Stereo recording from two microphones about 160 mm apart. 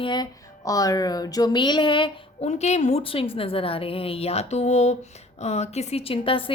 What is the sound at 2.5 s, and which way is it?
A woman's voice, 45° left (ahead or behind).